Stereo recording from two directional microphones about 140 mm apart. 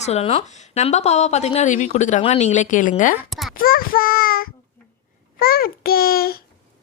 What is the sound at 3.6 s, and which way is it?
A child's voice, 90° left.